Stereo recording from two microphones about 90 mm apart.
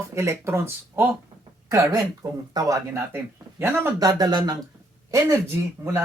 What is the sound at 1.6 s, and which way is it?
Speech, 40° right (ahead or behind).